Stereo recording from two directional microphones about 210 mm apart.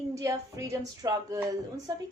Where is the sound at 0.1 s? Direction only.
15° right (ahead or behind).